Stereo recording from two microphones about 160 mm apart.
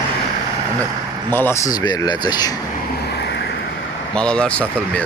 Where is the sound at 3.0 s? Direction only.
90° left.